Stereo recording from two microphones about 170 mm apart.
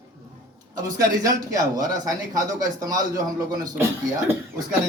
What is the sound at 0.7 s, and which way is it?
Speech, 20° right (ahead or behind).